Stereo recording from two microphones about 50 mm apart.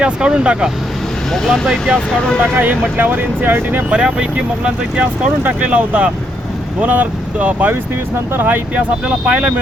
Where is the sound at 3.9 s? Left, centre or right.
Right.